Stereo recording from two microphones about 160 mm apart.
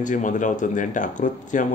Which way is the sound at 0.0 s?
55° left (ahead or behind).